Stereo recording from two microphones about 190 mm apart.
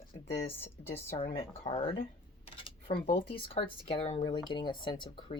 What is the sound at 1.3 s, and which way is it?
Speech, 25° left (ahead or behind).